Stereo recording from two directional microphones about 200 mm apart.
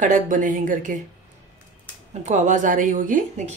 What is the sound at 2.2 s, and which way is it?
Speech, 35° right (ahead or behind).